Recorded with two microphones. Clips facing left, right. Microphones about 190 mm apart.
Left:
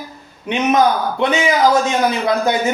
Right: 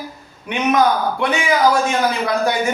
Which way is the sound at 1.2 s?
20° left (ahead or behind).